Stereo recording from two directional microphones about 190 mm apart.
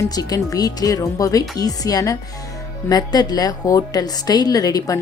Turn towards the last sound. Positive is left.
turn(degrees=20)  # may be behind; listen again after turning